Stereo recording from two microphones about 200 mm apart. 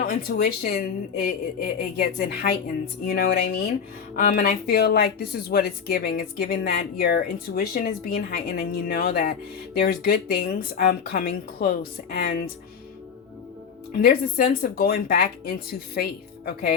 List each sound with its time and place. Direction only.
0.0 s speech: 45° left (ahead or behind)
14.0 s speech: 50° left (ahead or behind)